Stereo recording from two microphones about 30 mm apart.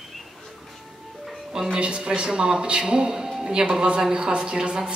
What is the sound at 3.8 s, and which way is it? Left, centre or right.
A woman's voice, right.